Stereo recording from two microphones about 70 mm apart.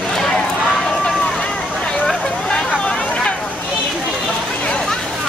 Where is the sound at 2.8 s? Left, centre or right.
Centre.